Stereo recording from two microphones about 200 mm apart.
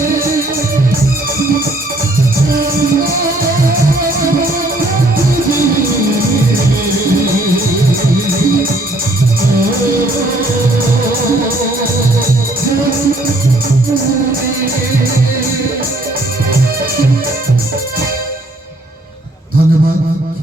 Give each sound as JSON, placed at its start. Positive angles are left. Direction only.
{"t": 0.0, "sound": "music", "side_deg": -15}
{"t": 2.5, "sound": "music", "side_deg": -45}
{"t": 6.1, "sound": "music", "side_deg": -45}